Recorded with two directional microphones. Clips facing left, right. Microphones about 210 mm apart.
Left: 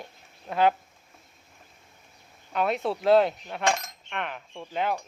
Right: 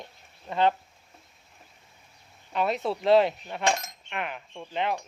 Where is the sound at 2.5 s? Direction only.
Centre (ahead or behind).